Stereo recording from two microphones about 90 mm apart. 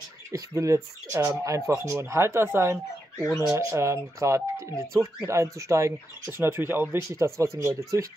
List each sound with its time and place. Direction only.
0.3 s speech: 35° right (ahead or behind)